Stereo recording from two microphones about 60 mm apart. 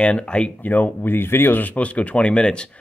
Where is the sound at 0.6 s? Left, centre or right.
Left.